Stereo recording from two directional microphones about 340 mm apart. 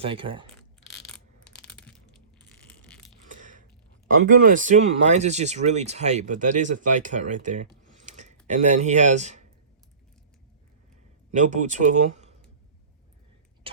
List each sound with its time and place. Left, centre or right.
0.0 s speech: centre
0.5 s crushing: centre
2.5 s coin: centre
3.2 s a sound: right
4.4 s speech: right
7.8 s a sound: right
11.3 s speech: right